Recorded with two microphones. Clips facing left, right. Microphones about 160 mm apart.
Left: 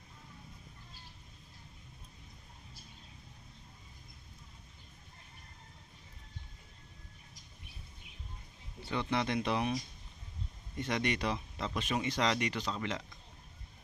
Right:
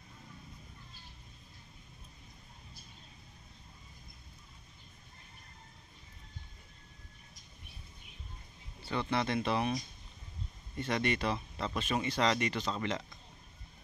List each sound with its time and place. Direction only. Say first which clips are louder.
8.8 s speech: right 1 dB; 15° left (ahead or behind)
10.8 s speech: right 1 dB; 15° left (ahead or behind)